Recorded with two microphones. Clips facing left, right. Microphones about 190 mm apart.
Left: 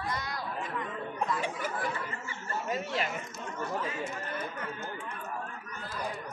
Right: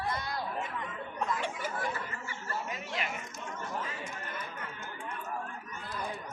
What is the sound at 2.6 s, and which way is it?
Speech, 40° left (ahead or behind).